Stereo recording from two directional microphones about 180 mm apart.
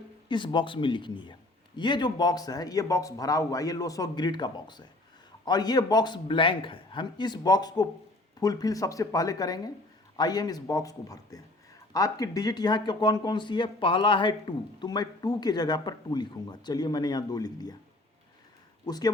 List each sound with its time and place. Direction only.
0.3 s speech: 25° left (ahead or behind)
18.9 s speech: 20° left (ahead or behind)